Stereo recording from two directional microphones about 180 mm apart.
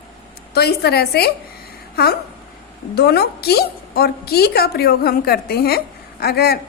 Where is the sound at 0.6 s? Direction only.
60° left (ahead or behind).